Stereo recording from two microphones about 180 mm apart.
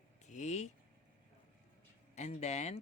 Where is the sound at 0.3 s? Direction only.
40° left (ahead or behind).